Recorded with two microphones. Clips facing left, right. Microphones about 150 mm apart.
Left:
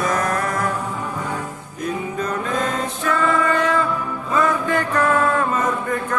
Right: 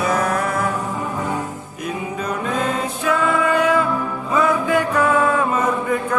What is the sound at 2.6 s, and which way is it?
Music, 5° right (ahead or behind).